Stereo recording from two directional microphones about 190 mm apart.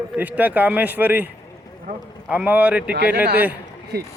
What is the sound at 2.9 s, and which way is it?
Speech, 55° right (ahead or behind).